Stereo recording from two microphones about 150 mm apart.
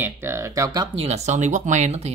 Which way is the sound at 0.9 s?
45° right (ahead or behind).